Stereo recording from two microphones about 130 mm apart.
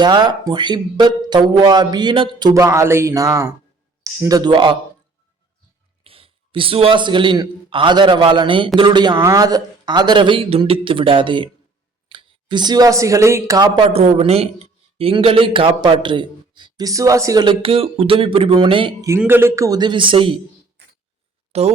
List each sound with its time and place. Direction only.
0.0 s a man's voice: 35° right (ahead or behind)
2.6 s a sound: 20° right (ahead or behind)
4.2 s a man's voice: 30° right (ahead or behind)
6.0 s a man's voice: 45° right (ahead or behind)
13.9 s a man's voice: 50° right (ahead or behind)
19.3 s a man's voice: 20° right (ahead or behind); by 20.3 s 40° right (ahead or behind)
21.5 s speech: 55° right (ahead or behind)